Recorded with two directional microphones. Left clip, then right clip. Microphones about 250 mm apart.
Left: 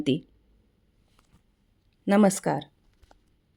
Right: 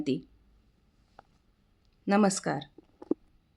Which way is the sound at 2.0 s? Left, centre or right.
Left.